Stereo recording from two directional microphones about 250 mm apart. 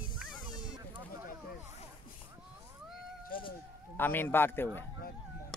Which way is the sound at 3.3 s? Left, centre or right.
Centre.